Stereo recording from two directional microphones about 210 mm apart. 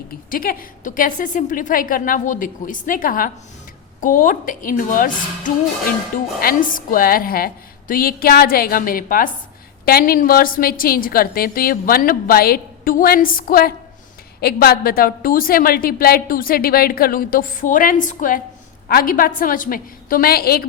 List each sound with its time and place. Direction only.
0.3 s a woman's voice: 40° left (ahead or behind)